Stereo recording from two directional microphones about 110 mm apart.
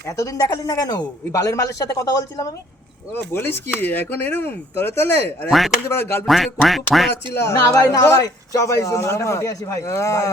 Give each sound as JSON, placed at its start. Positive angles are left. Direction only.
{"t": 0.0, "sound": "speech", "side_deg": 30}
{"t": 3.1, "sound": "speech", "side_deg": 20}
{"t": 5.5, "sound": "quack", "side_deg": 0}
{"t": 5.9, "sound": "speech", "side_deg": 20}
{"t": 6.2, "sound": "quack", "side_deg": 0}
{"t": 7.3, "sound": "speech", "side_deg": 25}